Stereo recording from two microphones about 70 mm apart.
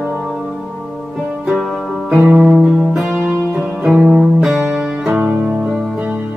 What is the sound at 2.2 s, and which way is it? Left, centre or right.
Music, right.